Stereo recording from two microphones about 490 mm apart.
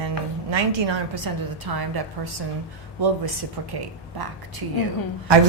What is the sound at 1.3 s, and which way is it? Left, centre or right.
A woman's voice, right.